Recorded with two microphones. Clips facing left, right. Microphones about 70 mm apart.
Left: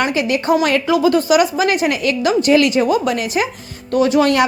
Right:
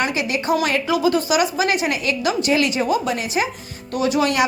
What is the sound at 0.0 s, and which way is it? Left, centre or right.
A woman's voice, left.